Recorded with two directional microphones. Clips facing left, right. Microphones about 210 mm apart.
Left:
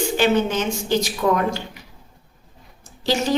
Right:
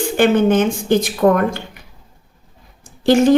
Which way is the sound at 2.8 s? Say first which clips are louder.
Right 10 dB; 55° right (ahead or behind).